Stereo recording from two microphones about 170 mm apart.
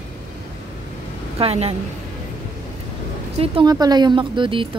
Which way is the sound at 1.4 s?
35° right (ahead or behind).